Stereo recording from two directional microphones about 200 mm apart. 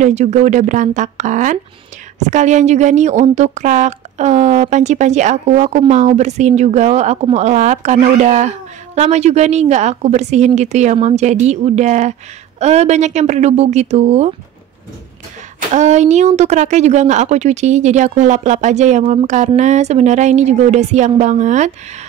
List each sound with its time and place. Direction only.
0.0 s speech: 35° right (ahead or behind)
15.7 s speech: 35° right (ahead or behind)